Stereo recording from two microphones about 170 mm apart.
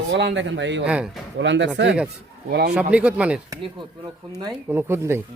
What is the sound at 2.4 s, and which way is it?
Speech, 75° right (ahead or behind).